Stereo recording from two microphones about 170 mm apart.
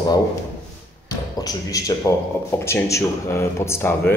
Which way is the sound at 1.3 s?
20° left (ahead or behind).